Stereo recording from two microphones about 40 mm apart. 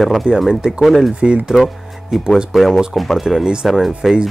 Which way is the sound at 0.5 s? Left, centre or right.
Centre.